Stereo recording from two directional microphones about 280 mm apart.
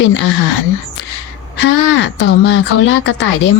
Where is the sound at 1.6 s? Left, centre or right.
Left.